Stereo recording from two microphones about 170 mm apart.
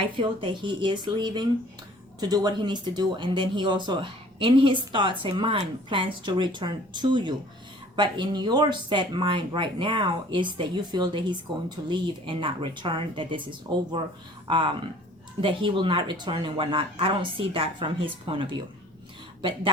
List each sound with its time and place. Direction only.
0.2 s speech: 30° right (ahead or behind)